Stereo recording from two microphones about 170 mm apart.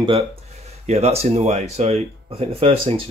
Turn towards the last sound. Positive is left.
turn(degrees=-35)  # may be behind; listen again after turning